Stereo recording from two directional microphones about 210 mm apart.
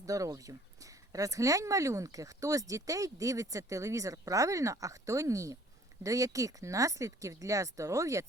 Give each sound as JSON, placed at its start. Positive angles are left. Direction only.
{"t": 0.0, "sound": "speech", "side_deg": -15}